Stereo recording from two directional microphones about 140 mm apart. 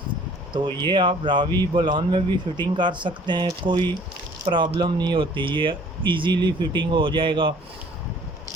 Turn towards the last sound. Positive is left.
turn(degrees=-35)  # may be behind; listen again after turning